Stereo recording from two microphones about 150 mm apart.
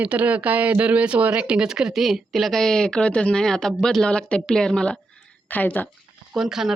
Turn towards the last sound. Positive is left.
turn(degrees=0)  # may be behind; listen again after turning